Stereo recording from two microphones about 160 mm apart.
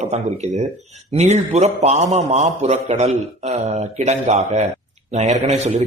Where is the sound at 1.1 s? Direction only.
45° right (ahead or behind).